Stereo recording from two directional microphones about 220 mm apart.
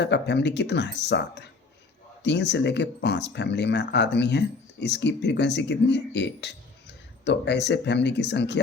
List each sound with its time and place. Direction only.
0.0 s speech: 50° left (ahead or behind)